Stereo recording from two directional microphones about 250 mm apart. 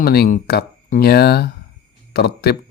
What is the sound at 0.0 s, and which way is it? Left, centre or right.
Speech, left.